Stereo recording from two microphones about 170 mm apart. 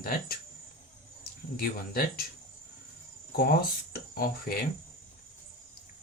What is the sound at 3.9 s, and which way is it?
Speech, 60° left (ahead or behind).